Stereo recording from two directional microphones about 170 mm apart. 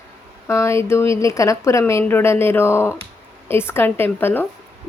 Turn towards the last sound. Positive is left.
turn(degrees=10)  # may be behind; listen again after turning